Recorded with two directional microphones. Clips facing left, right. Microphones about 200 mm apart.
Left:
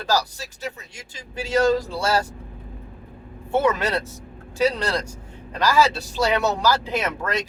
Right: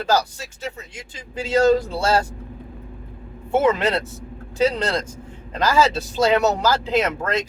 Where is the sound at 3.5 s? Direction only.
20° right (ahead or behind).